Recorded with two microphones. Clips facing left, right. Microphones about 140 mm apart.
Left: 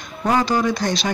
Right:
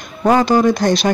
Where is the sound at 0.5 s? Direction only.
45° right (ahead or behind).